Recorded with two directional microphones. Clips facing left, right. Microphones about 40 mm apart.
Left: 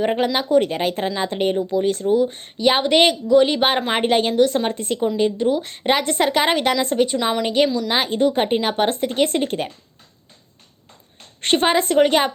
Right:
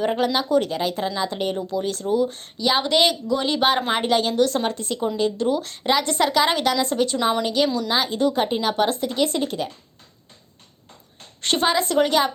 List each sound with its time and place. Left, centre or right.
0.0 s speech: left
4.4 s speech: left
4.7 s speech: left
5.1 s speech: left
5.7 s speech: left
6.9 s speech: left
11.3 s speech: left